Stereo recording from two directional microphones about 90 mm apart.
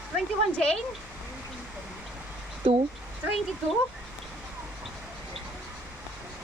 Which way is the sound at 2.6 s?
90° right.